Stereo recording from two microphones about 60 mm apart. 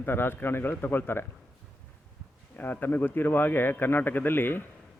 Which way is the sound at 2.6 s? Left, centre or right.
Left.